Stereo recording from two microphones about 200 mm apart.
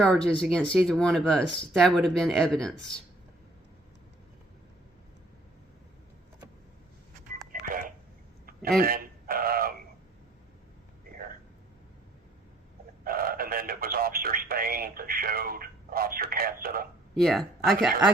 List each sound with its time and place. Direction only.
0.0 s speech: 5° left (ahead or behind)
7.7 s a sound: 45° right (ahead or behind)
13.1 s radio: 45° right (ahead or behind)
17.2 s speech: centre (ahead or behind)